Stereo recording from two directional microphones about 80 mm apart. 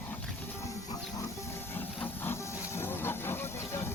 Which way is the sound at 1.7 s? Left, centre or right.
Left.